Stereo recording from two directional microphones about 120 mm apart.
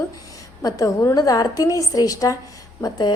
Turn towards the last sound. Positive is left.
turn(degrees=35)  # may be behind; listen again after turning